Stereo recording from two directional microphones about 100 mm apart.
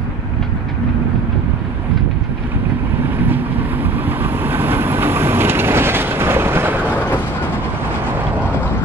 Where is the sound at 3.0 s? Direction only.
20° right (ahead or behind).